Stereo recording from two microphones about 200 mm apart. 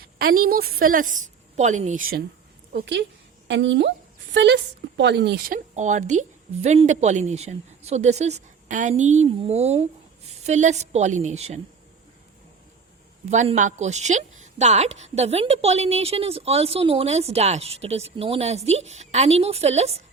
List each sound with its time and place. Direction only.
0.0 s a woman's voice: 50° right (ahead or behind)
2.7 s a woman's voice: 60° right (ahead or behind)
5.7 s a woman's voice: 35° right (ahead or behind)
13.3 s a woman's voice: 35° right (ahead or behind)